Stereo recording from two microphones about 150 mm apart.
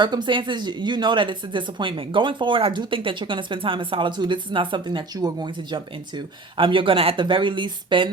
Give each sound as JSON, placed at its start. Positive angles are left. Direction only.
{"t": 0.0, "sound": "speech", "side_deg": -30}